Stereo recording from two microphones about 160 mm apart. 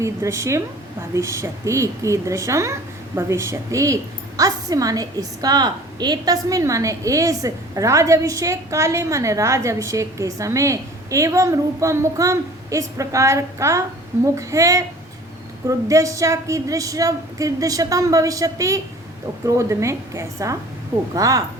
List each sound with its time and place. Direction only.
0.0 s a woman's voice: 20° right (ahead or behind)